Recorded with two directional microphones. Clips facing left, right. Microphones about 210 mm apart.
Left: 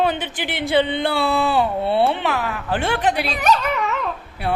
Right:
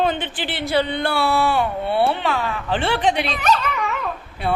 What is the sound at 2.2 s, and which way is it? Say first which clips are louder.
Speech: even; 10° left (ahead or behind).